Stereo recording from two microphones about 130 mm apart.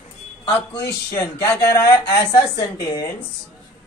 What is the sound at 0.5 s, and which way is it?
Speech, 20° left (ahead or behind).